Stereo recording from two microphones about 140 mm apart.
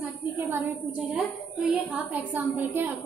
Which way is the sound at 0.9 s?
5° right (ahead or behind).